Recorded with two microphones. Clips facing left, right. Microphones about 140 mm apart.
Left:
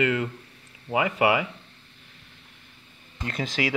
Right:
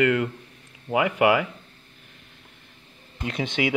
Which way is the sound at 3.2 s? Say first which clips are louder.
Right 2 dB; centre (ahead or behind).